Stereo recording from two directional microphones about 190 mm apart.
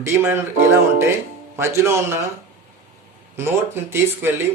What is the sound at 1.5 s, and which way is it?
Speech, 15° right (ahead or behind).